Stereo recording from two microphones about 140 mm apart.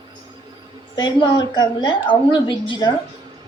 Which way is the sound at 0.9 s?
35° left (ahead or behind).